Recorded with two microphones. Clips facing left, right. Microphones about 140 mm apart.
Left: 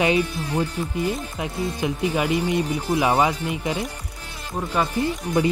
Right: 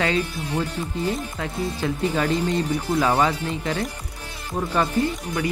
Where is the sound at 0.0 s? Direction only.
15° left (ahead or behind).